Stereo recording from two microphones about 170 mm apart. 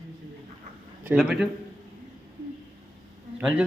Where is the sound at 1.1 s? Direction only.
Centre (ahead or behind).